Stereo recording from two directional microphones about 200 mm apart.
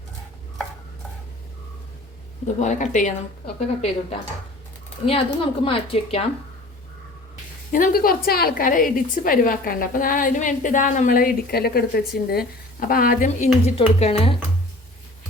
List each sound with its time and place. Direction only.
2.6 s a woman's voice: 35° left (ahead or behind)
7.7 s a woman's voice: 45° left (ahead or behind)